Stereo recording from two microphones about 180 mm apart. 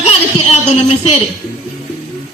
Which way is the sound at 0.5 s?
35° left (ahead or behind).